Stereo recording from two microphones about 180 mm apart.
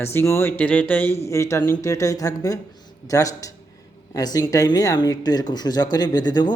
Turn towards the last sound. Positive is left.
turn(degrees=25)  # may be behind; listen again after turning